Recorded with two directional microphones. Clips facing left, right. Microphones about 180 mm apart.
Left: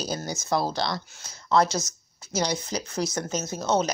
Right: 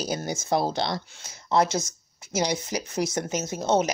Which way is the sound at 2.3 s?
15° right (ahead or behind).